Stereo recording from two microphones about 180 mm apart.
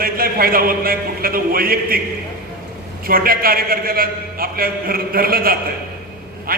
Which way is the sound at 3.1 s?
55° right (ahead or behind).